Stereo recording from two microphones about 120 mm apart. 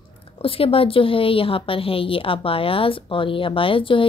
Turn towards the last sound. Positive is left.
turn(degrees=45)  # may be behind; listen again after turning